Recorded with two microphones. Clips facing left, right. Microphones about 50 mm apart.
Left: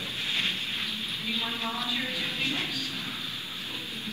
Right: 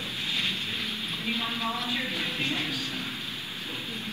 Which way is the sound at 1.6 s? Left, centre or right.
Right.